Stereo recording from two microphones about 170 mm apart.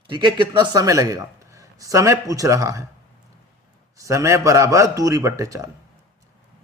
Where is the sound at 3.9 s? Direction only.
20° right (ahead or behind).